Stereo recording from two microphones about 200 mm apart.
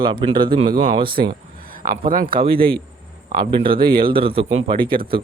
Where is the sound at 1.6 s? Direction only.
45° right (ahead or behind).